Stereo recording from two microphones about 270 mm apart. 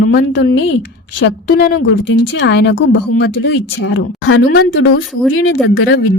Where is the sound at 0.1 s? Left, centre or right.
Left.